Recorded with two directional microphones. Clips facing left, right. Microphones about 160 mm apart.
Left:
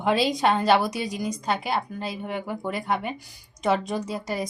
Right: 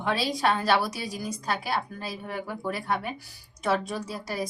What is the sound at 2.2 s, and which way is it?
A woman's voice, 20° left (ahead or behind).